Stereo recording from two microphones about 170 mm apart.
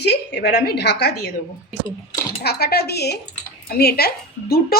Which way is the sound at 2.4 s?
65° left (ahead or behind).